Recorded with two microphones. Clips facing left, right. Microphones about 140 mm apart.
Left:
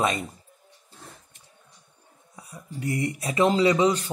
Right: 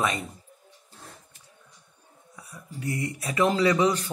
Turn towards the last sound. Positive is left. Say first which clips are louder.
# left 2 dB
turn(degrees=20)  # may be behind; listen again after turning